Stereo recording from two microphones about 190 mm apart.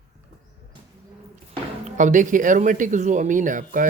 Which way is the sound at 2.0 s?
40° right (ahead or behind).